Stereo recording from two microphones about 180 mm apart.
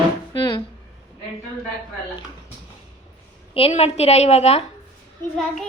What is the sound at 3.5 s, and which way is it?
A woman's voice, 35° left (ahead or behind).